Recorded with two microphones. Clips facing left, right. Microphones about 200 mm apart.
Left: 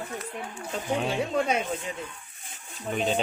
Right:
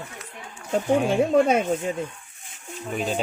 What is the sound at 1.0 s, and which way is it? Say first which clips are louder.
Speech: right 7 dB; 55° right (ahead or behind).